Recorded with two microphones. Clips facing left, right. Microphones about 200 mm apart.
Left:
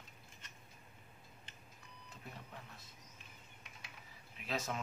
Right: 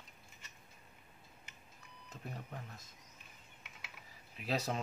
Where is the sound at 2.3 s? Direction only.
45° right (ahead or behind).